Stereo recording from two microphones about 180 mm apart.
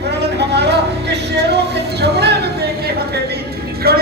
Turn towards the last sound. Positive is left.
turn(degrees=-60)  # may be behind; listen again after turning